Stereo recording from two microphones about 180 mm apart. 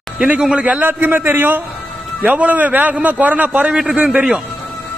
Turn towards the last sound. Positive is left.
turn(degrees=-5)  # may be behind; listen again after turning